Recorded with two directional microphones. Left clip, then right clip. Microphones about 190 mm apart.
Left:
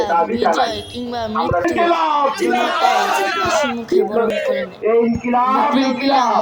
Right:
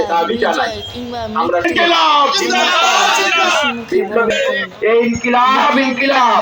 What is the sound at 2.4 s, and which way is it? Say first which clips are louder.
Speech: right 3 dB; 50° left (ahead or behind).